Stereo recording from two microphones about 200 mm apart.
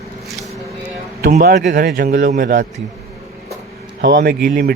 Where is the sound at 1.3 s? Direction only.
45° right (ahead or behind).